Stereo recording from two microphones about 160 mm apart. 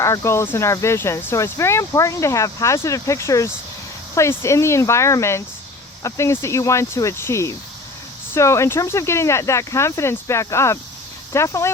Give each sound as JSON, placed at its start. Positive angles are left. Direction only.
{"t": 0.0, "sound": "speech", "side_deg": 20}